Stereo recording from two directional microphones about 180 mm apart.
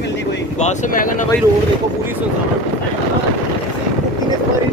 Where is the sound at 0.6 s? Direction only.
45° left (ahead or behind).